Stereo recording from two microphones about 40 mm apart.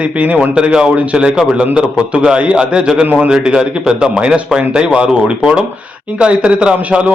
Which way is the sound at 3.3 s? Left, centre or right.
Centre.